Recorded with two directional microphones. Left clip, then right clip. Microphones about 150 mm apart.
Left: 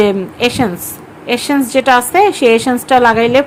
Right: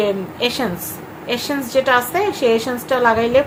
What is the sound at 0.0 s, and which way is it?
Speech, 50° left (ahead or behind).